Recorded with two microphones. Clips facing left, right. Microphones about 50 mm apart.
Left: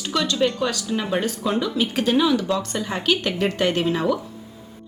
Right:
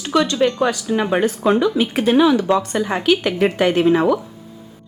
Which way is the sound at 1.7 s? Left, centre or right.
Centre.